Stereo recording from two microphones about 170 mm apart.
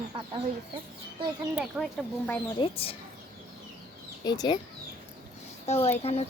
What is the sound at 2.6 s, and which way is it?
Speech, 35° left (ahead or behind).